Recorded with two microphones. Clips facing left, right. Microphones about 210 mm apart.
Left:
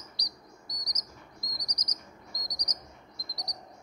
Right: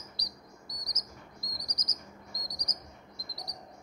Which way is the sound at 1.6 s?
25° right (ahead or behind).